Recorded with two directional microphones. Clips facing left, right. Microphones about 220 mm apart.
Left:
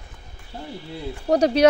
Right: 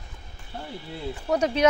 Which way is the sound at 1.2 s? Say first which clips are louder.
Left 6 dB; 35° left (ahead or behind).